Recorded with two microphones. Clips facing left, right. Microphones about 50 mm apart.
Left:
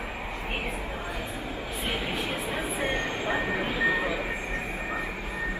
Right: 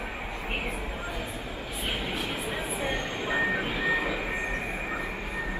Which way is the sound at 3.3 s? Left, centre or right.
Centre.